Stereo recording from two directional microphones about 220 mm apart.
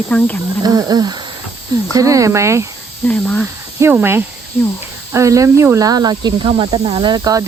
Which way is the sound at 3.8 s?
10° right (ahead or behind).